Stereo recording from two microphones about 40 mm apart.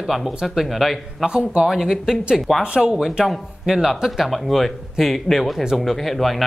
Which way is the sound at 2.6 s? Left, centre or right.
Right.